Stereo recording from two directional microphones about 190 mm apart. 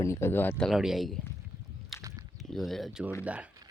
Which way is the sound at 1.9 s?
Centre (ahead or behind).